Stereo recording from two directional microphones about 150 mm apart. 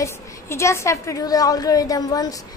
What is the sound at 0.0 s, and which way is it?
A woman's voice, 20° left (ahead or behind).